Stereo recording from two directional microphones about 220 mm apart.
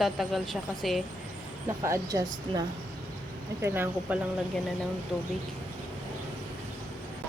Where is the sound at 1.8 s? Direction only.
15° right (ahead or behind).